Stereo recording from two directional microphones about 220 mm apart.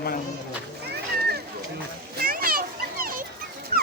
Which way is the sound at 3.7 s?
40° right (ahead or behind).